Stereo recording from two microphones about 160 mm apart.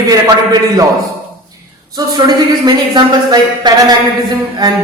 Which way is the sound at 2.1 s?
25° right (ahead or behind).